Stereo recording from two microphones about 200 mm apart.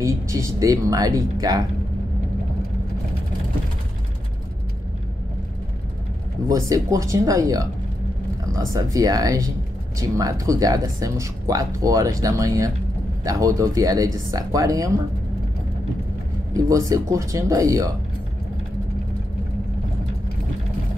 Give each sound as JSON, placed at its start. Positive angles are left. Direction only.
{"t": 0.0, "sound": "speech", "side_deg": -15}
{"t": 6.5, "sound": "speech", "side_deg": -15}
{"t": 16.5, "sound": "speech", "side_deg": -15}